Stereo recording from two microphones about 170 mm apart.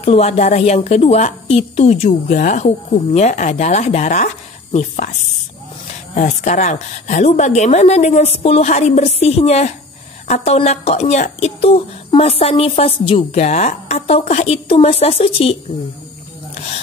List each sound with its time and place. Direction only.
0.0 s a woman's voice: 40° left (ahead or behind)
6.1 s a woman's voice: 45° left (ahead or behind)